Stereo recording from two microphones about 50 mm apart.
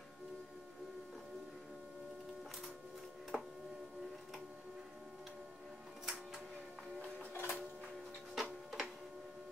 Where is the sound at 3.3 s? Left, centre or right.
Centre.